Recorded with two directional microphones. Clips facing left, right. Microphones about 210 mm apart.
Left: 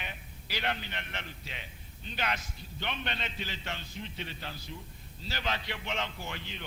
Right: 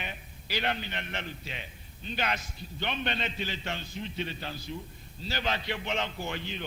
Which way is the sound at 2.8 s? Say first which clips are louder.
Right 5 dB; 25° right (ahead or behind).